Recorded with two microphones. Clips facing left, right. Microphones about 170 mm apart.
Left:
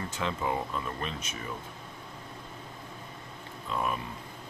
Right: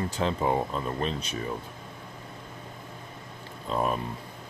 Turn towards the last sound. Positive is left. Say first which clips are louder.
# right 4 dB
turn(degrees=-35)  # may be behind; listen again after turning